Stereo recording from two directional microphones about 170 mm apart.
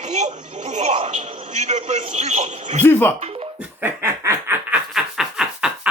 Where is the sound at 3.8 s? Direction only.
15° right (ahead or behind).